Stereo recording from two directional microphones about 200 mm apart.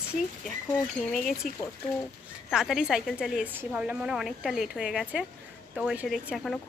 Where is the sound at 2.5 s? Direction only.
Centre (ahead or behind).